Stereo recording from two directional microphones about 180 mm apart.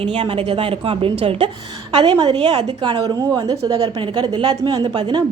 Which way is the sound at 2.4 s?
25° right (ahead or behind).